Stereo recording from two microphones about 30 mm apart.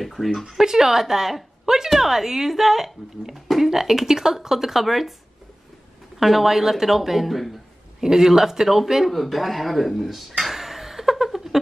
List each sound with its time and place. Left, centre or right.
0.0 s speech: centre
0.5 s speech: centre
6.1 s speech: centre
8.0 s speech: centre
9.1 s a sound: centre